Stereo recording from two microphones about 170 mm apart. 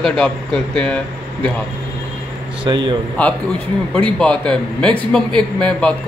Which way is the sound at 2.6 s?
25° right (ahead or behind).